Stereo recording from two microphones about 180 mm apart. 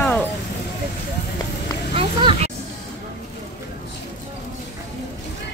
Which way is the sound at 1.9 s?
30° right (ahead or behind).